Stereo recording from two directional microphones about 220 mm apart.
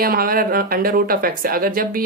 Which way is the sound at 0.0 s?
45° right (ahead or behind).